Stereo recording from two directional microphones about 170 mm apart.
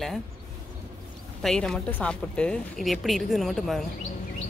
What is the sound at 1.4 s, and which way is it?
A woman's voice, 5° left (ahead or behind).